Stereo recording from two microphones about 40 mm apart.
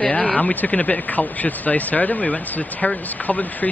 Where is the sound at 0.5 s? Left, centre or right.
Left.